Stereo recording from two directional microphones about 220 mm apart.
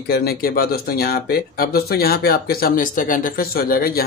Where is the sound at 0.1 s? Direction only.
45° left (ahead or behind).